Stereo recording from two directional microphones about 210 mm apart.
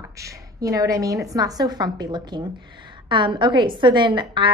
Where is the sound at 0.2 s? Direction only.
15° right (ahead or behind).